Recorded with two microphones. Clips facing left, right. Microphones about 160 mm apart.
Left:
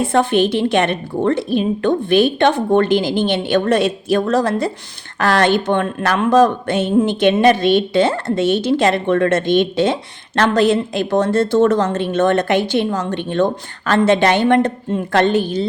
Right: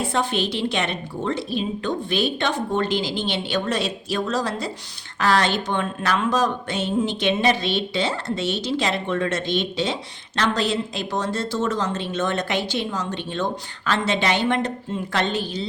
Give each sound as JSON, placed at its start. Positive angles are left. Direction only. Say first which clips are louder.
{"t": 0.0, "sound": "speech", "louder": "left 9 dB", "side_deg": 55}